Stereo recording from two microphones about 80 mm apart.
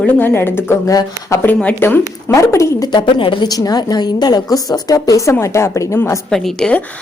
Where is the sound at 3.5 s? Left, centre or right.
Left.